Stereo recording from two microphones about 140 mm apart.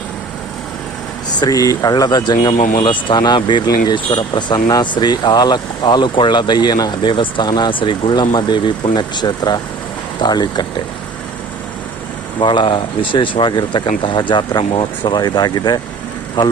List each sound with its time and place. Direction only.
1.4 s speech: 25° left (ahead or behind)
12.4 s speech: 35° left (ahead or behind)